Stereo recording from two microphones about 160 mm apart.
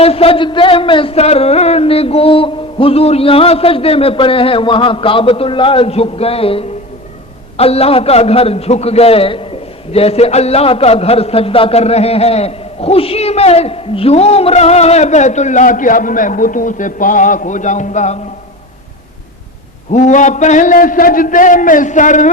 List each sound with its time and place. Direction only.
0.0 s a man's voice: 40° left (ahead or behind)
19.9 s a man's voice: 50° left (ahead or behind)